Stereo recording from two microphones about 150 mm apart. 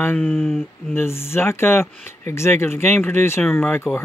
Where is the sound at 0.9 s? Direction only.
15° left (ahead or behind).